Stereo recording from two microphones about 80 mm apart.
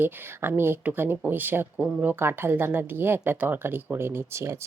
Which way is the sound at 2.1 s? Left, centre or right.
Right.